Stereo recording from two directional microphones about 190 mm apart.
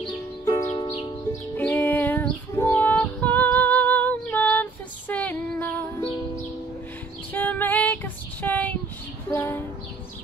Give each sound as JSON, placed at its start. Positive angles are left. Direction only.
{"t": 0.5, "sound": "music", "side_deg": 15}
{"t": 1.6, "sound": "female singing", "side_deg": 10}
{"t": 7.3, "sound": "female singing", "side_deg": 10}
{"t": 9.3, "sound": "a sound", "side_deg": 10}